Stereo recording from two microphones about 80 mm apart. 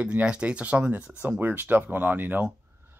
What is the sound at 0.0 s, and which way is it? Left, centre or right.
Speech, centre.